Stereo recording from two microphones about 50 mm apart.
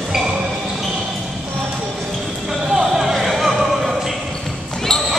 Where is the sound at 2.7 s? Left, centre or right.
Centre.